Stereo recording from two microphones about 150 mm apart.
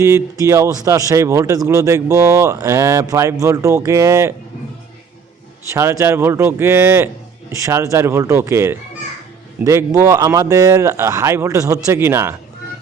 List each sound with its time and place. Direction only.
0.0 s speech: 20° right (ahead or behind)
5.7 s speech: 20° right (ahead or behind)